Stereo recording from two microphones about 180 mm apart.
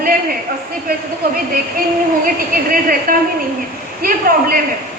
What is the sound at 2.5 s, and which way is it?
Speech, 55° right (ahead or behind).